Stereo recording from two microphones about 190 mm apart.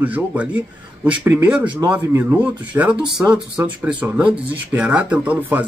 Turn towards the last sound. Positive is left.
turn(degrees=-10)  # may be behind; listen again after turning